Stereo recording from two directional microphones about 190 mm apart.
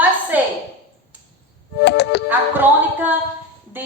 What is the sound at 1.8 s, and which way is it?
Music, 60° left (ahead or behind).